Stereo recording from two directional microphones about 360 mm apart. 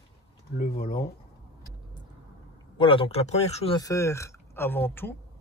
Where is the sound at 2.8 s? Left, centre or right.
Centre.